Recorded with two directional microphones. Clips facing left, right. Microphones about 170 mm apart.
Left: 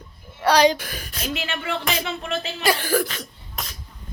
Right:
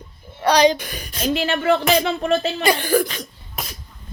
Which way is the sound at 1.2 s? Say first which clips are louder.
Right 9 dB; 35° right (ahead or behind).